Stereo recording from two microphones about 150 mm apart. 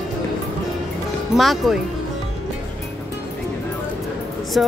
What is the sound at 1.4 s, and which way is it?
Speech, centre (ahead or behind).